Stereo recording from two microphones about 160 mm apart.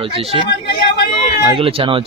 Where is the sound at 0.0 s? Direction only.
40° right (ahead or behind).